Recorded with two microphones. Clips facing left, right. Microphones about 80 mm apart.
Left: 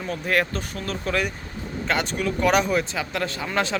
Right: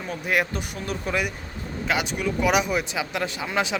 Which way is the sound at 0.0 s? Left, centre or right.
Centre.